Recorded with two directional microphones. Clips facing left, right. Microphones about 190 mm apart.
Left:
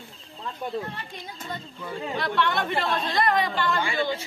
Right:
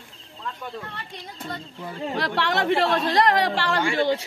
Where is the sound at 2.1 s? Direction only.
85° right.